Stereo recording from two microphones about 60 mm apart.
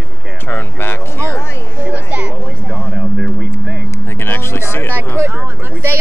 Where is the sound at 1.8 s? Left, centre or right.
Right.